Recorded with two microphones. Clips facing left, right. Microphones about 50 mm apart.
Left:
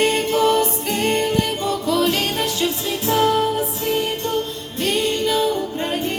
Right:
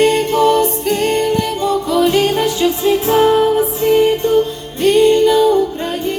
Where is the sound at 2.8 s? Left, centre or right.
Right.